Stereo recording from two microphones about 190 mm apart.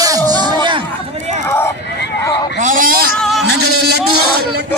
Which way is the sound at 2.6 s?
45° right (ahead or behind).